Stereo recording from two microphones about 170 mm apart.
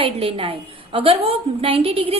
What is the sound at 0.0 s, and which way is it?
A woman's voice, 35° right (ahead or behind).